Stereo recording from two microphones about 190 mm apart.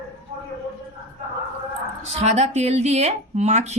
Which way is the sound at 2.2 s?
35° right (ahead or behind).